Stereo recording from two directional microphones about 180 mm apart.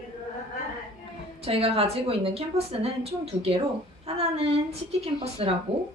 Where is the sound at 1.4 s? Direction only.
35° right (ahead or behind).